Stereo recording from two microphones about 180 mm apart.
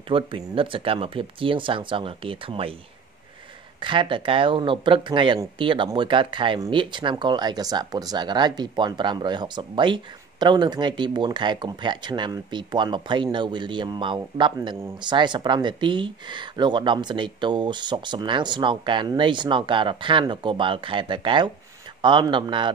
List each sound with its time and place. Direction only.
0.1 s speech: 30° right (ahead or behind)
3.8 s speech: 25° right (ahead or behind)